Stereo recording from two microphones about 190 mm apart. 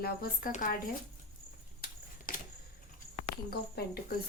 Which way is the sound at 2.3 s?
45° left (ahead or behind).